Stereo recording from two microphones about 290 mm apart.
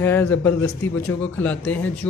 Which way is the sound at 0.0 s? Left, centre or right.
Centre.